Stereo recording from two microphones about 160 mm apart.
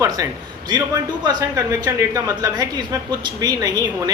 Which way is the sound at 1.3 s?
25° right (ahead or behind).